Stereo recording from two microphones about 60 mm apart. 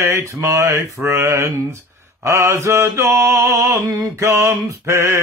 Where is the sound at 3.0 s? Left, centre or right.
Right.